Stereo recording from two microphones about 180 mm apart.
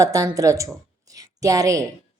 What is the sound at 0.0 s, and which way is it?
A woman's voice, 20° right (ahead or behind).